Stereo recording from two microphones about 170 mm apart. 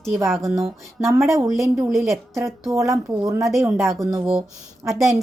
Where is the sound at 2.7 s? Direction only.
20° right (ahead or behind).